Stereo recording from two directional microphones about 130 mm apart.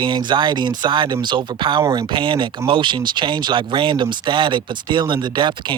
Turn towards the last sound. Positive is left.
turn(degrees=-35)  # may be behind; listen again after turning